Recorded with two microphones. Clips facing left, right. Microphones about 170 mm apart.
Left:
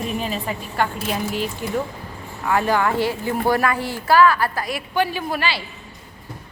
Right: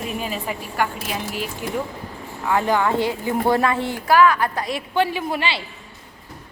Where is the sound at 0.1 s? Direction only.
5° right (ahead or behind).